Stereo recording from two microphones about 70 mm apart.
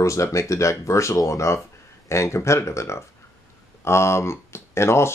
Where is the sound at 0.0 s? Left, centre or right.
Left.